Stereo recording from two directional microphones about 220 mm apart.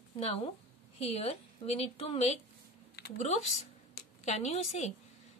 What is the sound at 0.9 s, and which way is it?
A woman's voice, 25° left (ahead or behind).